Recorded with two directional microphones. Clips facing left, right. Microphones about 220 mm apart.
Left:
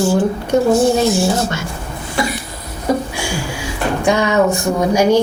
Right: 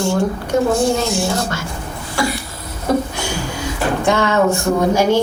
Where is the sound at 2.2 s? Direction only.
20° left (ahead or behind).